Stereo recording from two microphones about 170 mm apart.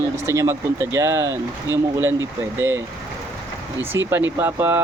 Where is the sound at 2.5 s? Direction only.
15° right (ahead or behind).